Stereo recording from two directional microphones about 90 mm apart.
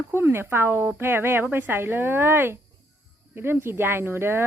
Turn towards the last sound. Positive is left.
turn(degrees=-25)  # may be behind; listen again after turning